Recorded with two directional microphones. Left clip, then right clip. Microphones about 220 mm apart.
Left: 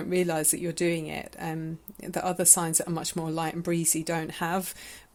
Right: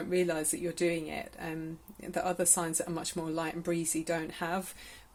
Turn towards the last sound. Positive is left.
turn(degrees=45)  # may be behind; listen again after turning